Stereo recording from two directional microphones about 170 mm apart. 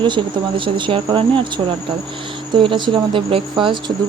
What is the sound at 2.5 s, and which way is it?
Speech, 30° right (ahead or behind).